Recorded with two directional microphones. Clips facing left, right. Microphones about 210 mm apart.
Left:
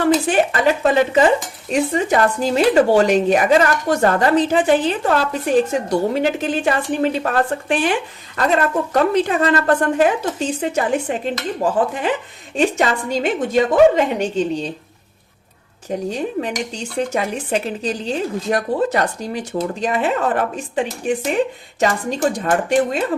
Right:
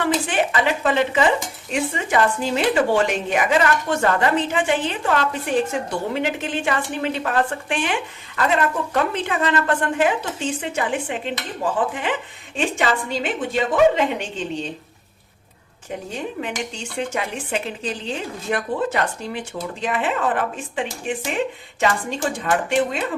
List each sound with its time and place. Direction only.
0.3 s speech: 40° left (ahead or behind)
12.5 s speech: 40° left (ahead or behind)
16.1 s speech: 40° left (ahead or behind)